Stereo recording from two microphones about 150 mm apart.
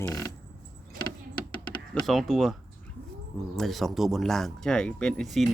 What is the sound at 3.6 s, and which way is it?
Speech, centre (ahead or behind).